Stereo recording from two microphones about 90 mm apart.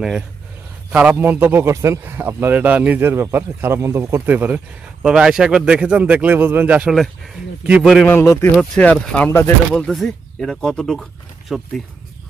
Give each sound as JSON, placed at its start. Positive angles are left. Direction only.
{"t": 0.9, "sound": "a man's voice", "side_deg": -15}
{"t": 4.3, "sound": "a man's voice", "side_deg": -20}
{"t": 5.0, "sound": "speech", "side_deg": -10}
{"t": 8.1, "sound": "speech", "side_deg": 30}
{"t": 8.7, "sound": "speech", "side_deg": 15}
{"t": 9.3, "sound": "speech", "side_deg": 25}
{"t": 9.8, "sound": "speech", "side_deg": 5}